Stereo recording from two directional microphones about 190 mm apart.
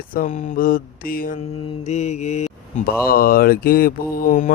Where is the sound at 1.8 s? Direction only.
35° left (ahead or behind).